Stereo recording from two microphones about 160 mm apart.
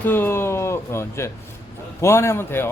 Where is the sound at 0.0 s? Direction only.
15° left (ahead or behind).